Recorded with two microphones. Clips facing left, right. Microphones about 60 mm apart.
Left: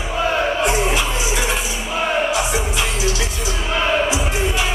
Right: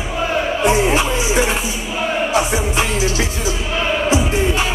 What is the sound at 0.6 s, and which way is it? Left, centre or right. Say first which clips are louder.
Music: right 4 dB; right.